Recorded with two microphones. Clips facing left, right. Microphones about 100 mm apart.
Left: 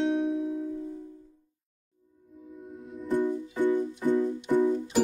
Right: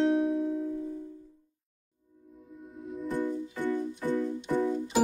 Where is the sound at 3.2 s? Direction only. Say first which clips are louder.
Left 6 dB; 20° left (ahead or behind).